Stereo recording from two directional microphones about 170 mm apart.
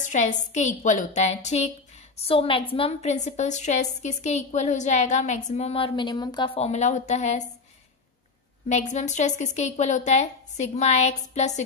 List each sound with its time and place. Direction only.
0.0 s a woman's voice: 45° left (ahead or behind)
8.6 s a woman's voice: 45° left (ahead or behind)